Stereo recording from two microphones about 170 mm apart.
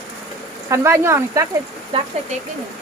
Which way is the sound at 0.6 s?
15° right (ahead or behind).